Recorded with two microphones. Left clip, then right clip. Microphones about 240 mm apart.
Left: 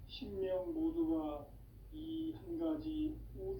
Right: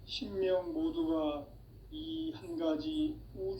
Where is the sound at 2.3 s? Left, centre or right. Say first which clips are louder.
Right 6 dB; right.